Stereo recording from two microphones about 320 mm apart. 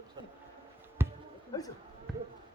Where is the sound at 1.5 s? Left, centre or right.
Centre.